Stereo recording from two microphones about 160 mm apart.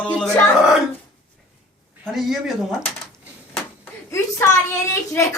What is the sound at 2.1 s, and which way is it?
Speech, centre (ahead or behind).